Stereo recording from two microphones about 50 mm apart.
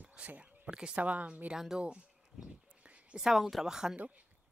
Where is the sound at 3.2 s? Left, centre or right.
Centre.